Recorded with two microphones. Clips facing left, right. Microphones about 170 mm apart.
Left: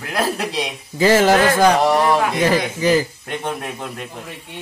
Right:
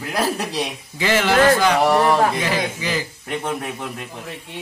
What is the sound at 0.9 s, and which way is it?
Speech, 40° left (ahead or behind).